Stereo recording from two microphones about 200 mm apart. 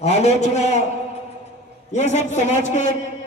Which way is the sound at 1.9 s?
35° left (ahead or behind).